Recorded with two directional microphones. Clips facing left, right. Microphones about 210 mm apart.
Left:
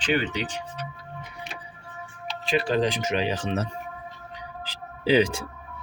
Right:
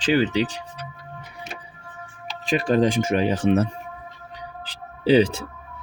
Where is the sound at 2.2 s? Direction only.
45° right (ahead or behind).